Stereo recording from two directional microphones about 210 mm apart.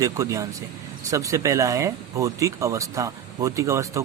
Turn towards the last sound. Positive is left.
turn(degrees=-15)  # may be behind; listen again after turning